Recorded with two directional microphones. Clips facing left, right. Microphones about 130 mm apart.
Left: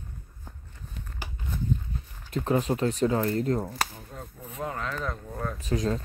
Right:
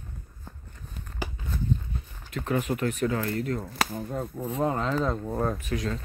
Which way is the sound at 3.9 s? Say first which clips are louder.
Right 11 dB; 55° right (ahead or behind).